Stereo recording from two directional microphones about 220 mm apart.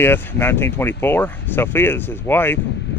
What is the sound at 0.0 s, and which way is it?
Speech, 10° left (ahead or behind).